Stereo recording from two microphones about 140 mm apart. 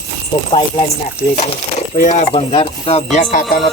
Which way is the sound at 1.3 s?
55° left (ahead or behind).